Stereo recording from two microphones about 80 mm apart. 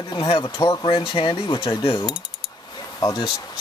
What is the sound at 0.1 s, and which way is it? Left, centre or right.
Speech, left.